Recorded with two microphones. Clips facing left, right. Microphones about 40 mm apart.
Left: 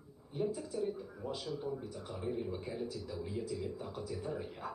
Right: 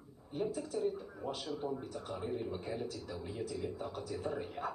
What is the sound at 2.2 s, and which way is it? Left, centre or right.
Speech, centre.